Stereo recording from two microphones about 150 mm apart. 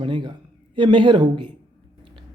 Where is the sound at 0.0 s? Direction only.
35° right (ahead or behind).